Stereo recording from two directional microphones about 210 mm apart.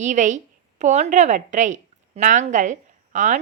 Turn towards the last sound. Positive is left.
turn(degrees=-35)  # may be behind; listen again after turning